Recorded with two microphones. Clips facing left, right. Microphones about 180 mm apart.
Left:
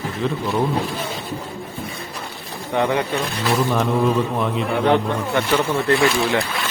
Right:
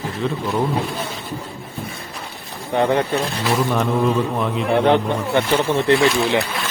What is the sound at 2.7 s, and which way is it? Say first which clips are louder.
Speech: right 2 dB; 35° right (ahead or behind).